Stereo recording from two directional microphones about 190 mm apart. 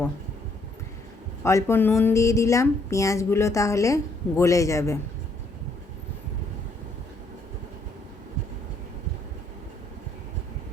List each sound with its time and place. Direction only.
1.5 s speech: 15° left (ahead or behind)